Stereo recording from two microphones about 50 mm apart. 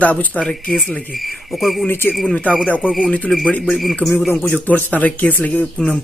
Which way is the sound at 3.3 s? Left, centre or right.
Centre.